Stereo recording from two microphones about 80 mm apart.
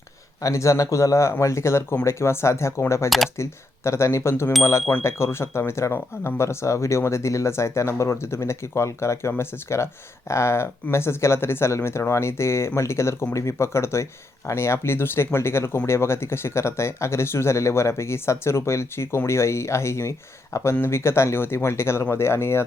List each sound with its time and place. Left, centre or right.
0.4 s speech: left